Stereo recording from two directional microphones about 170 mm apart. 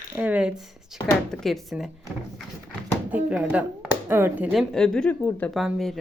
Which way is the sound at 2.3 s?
10° left (ahead or behind).